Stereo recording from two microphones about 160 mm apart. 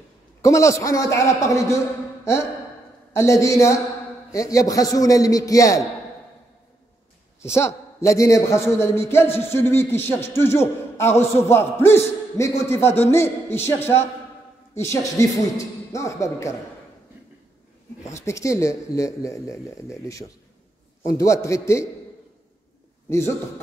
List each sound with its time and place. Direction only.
0.4 s speech: 20° left (ahead or behind)
3.1 s speech: 15° left (ahead or behind)
7.5 s a man's voice: 15° left (ahead or behind)
18.0 s speech: 20° left (ahead or behind)
23.0 s a man's voice: 15° left (ahead or behind)